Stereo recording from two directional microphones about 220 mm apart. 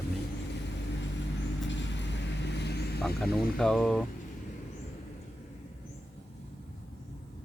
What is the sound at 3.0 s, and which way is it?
Speech, centre (ahead or behind).